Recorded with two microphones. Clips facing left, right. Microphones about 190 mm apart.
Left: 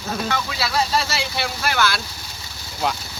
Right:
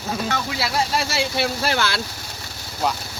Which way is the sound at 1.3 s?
25° right (ahead or behind).